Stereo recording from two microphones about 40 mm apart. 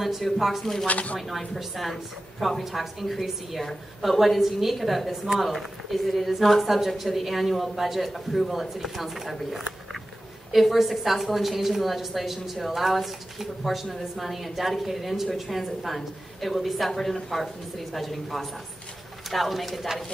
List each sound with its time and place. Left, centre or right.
0.0 s a woman's voice: centre
0.8 s speech: left
1.6 s a woman's voice: centre